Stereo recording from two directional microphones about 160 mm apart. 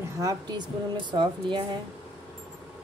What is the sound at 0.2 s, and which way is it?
Speech, 25° right (ahead or behind).